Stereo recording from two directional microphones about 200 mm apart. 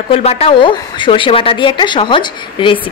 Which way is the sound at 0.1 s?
30° left (ahead or behind).